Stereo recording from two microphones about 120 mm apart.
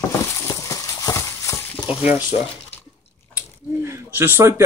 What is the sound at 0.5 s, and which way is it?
Clip-clop, 30° left (ahead or behind).